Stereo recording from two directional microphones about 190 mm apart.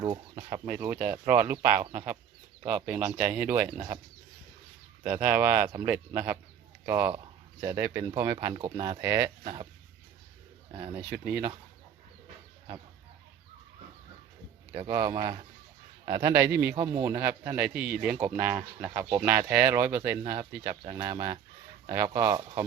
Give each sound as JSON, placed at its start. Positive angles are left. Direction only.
{"t": 0.0, "sound": "speech", "side_deg": -20}
{"t": 5.2, "sound": "speech", "side_deg": -10}
{"t": 9.4, "sound": "speech", "side_deg": -30}
{"t": 10.9, "sound": "speech", "side_deg": -10}
{"t": 14.7, "sound": "speech", "side_deg": -30}